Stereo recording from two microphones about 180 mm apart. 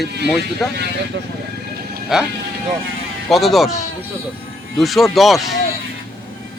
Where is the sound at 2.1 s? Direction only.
5° right (ahead or behind).